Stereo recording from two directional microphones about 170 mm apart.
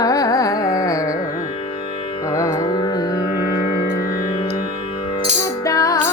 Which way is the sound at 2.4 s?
20° left (ahead or behind).